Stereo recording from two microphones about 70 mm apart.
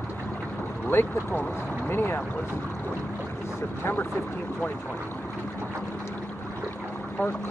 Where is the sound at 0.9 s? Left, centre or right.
Left.